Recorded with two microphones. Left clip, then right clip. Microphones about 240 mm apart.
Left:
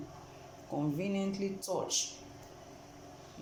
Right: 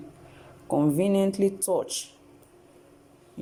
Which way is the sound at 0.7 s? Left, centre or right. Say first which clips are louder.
Right 12 dB; right.